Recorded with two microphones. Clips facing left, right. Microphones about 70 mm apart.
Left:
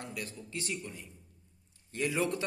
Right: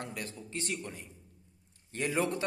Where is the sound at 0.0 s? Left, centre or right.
Right.